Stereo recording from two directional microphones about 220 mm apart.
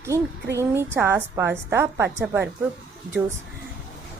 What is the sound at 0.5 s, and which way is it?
Speech, 10° right (ahead or behind).